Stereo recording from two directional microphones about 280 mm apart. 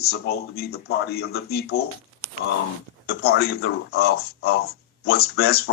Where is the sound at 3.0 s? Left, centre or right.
Left.